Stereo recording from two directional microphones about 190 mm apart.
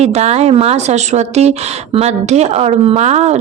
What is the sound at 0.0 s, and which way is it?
Speech, 35° right (ahead or behind).